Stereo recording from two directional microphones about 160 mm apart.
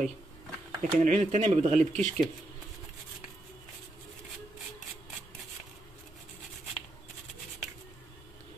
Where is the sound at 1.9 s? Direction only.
5° left (ahead or behind).